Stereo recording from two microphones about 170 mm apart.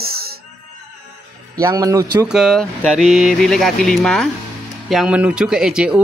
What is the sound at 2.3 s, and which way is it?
Speech, centre (ahead or behind).